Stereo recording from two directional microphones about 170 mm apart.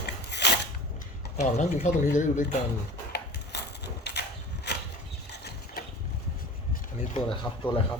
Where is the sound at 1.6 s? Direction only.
45° left (ahead or behind).